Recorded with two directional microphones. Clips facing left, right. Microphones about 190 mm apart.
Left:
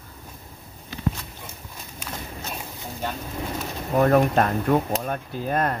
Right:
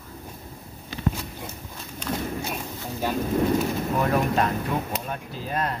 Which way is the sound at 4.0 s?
50° left (ahead or behind).